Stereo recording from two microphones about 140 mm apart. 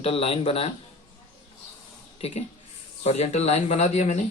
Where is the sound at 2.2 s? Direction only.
50° left (ahead or behind).